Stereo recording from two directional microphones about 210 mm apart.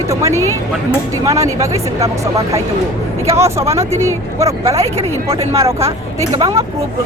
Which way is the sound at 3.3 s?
15° right (ahead or behind).